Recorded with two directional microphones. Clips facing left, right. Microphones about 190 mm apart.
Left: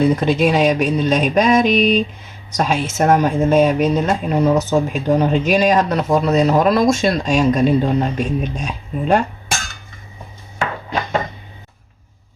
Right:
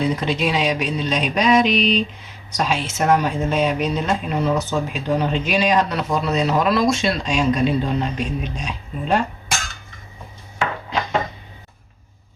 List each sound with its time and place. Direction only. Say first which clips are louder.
0.0 s speech: left 6 dB; 50° left (ahead or behind)